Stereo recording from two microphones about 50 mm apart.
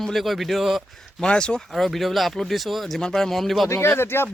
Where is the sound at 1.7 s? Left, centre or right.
Centre.